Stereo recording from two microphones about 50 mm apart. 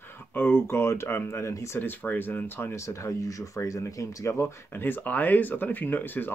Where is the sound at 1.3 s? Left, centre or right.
Left.